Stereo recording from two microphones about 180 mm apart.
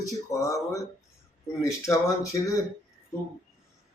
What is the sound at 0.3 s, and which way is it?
Speech, 20° left (ahead or behind).